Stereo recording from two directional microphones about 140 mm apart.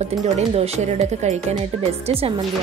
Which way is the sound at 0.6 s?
50° right (ahead or behind).